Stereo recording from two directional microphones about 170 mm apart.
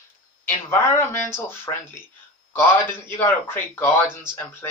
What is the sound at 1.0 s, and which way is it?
Speech, 15° left (ahead or behind).